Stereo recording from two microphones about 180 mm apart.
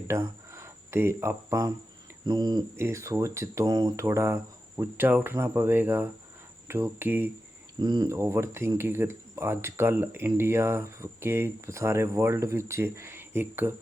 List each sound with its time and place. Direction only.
0.1 s speech: 15° right (ahead or behind)
7.8 s speech: 20° right (ahead or behind)